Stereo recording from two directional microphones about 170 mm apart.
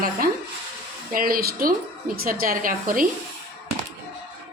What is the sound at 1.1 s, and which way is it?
A woman's voice, 60° right (ahead or behind).